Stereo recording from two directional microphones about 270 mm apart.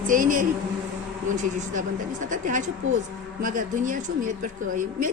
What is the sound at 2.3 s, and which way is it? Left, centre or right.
Speech, right.